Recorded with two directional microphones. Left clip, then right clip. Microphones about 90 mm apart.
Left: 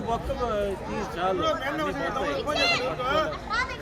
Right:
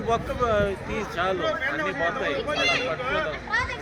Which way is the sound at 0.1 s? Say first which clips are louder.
Right 5 dB; 45° left (ahead or behind).